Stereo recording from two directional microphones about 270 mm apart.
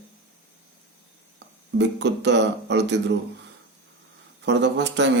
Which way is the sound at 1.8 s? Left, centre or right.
Right.